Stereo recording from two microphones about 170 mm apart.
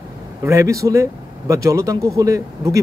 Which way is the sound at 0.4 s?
15° right (ahead or behind).